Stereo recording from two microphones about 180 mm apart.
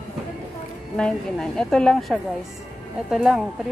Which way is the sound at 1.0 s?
5° left (ahead or behind).